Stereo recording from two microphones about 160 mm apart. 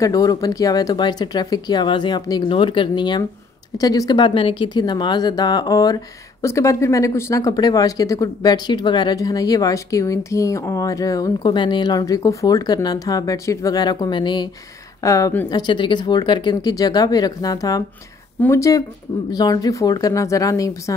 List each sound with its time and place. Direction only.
0.0 s speech: 20° left (ahead or behind)